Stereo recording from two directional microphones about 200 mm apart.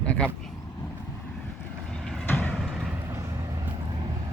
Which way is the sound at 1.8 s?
5° left (ahead or behind).